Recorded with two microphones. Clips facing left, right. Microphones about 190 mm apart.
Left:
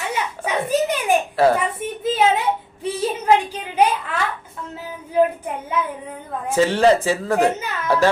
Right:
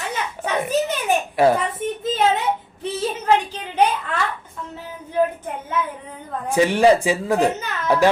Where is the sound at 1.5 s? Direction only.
10° left (ahead or behind).